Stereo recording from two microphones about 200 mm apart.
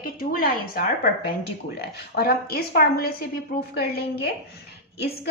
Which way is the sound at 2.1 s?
50° left (ahead or behind).